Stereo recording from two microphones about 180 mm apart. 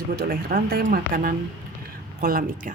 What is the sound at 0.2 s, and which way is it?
Speech, 55° right (ahead or behind).